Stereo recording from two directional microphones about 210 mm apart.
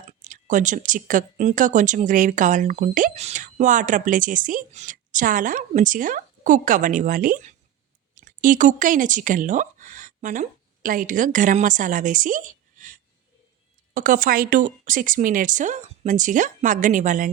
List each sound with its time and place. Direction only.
0.1 s a woman's voice: 35° right (ahead or behind)